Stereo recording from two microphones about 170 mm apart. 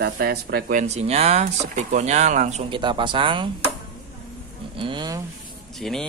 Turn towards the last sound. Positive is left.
turn(degrees=0)  # may be behind; listen again after turning